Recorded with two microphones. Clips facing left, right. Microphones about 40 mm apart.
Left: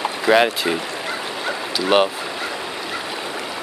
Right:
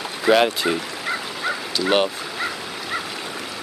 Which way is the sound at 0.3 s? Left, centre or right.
Centre.